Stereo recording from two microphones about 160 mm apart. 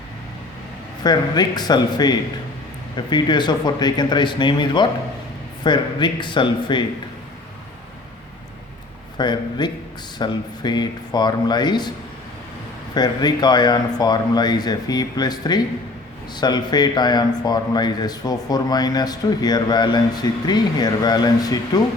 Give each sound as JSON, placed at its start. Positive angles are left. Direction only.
{"t": 1.0, "sound": "speech", "side_deg": 25}
{"t": 9.1, "sound": "speech", "side_deg": 25}
{"t": 12.9, "sound": "speech", "side_deg": 25}